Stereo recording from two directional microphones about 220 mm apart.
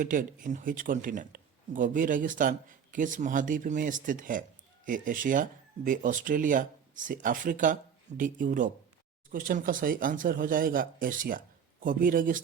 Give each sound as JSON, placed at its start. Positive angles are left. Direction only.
{"t": 0.0, "sound": "speech", "side_deg": -35}